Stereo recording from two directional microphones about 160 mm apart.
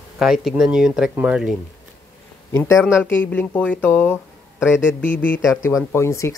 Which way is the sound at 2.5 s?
20° left (ahead or behind).